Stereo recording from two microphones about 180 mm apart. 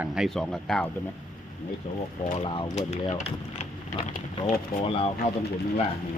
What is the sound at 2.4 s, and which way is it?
Speech, 30° left (ahead or behind).